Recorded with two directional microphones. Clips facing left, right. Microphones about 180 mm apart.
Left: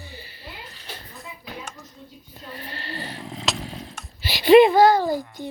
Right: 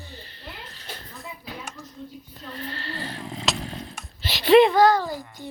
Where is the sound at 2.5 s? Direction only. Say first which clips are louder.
Right 1 dB; 15° left (ahead or behind).